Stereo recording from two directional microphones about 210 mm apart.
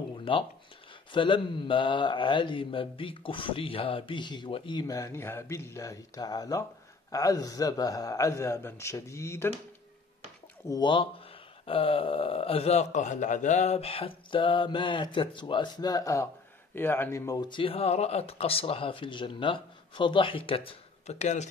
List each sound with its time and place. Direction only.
0.2 s a sound: 25° left (ahead or behind)
1.1 s a man's voice: 25° left (ahead or behind)
10.7 s speech: 20° left (ahead or behind)